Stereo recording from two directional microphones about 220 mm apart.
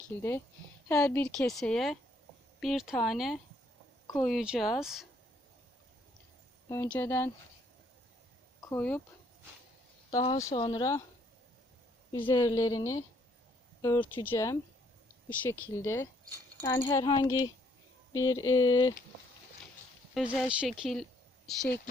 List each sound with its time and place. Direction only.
0.2 s a woman's voice: 10° left (ahead or behind)
6.7 s a woman's voice: 10° left (ahead or behind)
8.7 s a woman's voice: 5° left (ahead or behind)
10.1 s speech: 15° left (ahead or behind)
10.7 s a woman's voice: 15° left (ahead or behind)
12.2 s a woman's voice: 15° left (ahead or behind)
20.3 s speech: centre (ahead or behind)